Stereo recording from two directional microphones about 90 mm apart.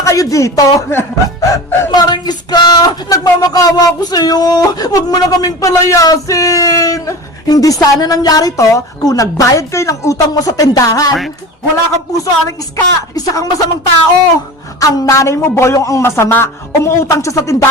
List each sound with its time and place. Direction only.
0.0 s speech: 40° left (ahead or behind)
1.4 s music: 35° left (ahead or behind)
1.9 s speech: 50° left (ahead or behind)
12.1 s speech: 40° left (ahead or behind)
14.8 s speech: 40° left (ahead or behind)